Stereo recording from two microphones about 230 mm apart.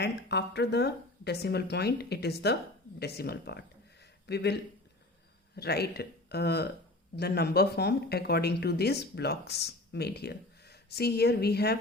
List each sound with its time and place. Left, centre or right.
0.0 s speech: left